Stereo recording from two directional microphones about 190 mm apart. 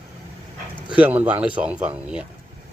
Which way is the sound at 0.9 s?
5° right (ahead or behind).